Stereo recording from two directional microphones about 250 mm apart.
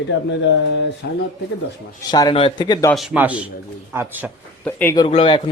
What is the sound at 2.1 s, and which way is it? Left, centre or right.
Speech, centre.